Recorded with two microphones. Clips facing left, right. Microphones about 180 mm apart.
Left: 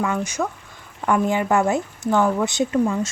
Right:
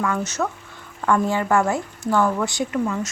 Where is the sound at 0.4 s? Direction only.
10° left (ahead or behind).